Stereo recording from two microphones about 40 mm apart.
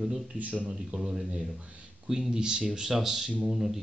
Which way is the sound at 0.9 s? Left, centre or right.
Centre.